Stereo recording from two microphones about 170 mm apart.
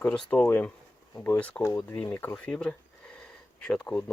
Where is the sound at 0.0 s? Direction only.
10° left (ahead or behind).